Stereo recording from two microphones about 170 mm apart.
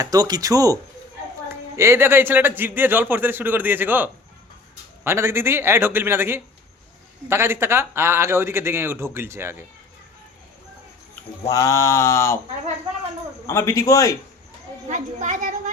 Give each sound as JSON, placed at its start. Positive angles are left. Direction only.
{"t": 0.0, "sound": "speech", "side_deg": -20}
{"t": 11.1, "sound": "speech", "side_deg": 20}
{"t": 13.5, "sound": "a man's voice", "side_deg": 15}
{"t": 14.8, "sound": "a child's voice", "side_deg": -45}